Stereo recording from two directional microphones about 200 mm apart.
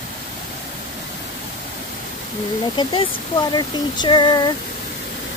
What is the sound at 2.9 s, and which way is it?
Speech, 25° left (ahead or behind).